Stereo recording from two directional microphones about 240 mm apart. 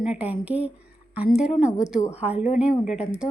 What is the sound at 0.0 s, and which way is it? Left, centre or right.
A woman's voice, centre.